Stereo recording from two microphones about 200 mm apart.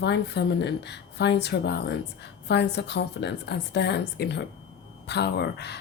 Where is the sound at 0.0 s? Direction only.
60° left (ahead or behind).